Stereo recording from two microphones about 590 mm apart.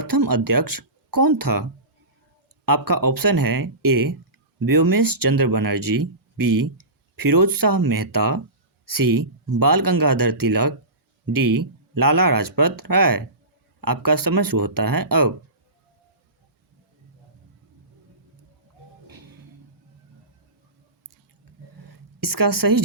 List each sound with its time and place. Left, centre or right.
0.0 s speech: right
2.6 s speech: right
19.0 s music: right
21.8 s a sound: right